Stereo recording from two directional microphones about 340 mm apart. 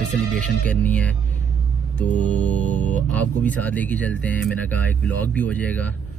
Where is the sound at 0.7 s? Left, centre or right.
Centre.